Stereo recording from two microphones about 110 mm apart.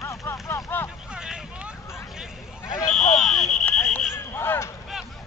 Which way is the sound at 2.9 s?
5° left (ahead or behind).